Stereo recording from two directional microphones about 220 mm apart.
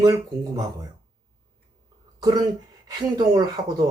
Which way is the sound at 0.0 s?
15° right (ahead or behind).